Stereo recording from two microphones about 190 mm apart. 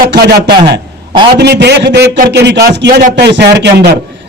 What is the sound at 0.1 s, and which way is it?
A man's voice, 60° right (ahead or behind).